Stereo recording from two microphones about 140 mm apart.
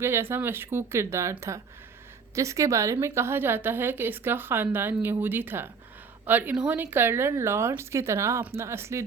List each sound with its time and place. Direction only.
0.0 s speech: 15° right (ahead or behind)